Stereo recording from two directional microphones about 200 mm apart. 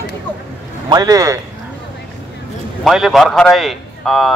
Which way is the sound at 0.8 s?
20° right (ahead or behind).